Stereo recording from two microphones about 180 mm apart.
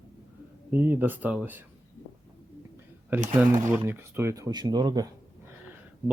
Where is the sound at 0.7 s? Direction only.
10° right (ahead or behind).